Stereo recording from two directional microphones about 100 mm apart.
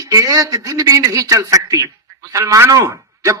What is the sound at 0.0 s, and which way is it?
A man's voice, 35° right (ahead or behind).